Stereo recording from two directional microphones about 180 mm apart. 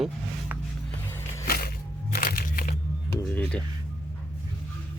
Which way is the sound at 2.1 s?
55° left (ahead or behind).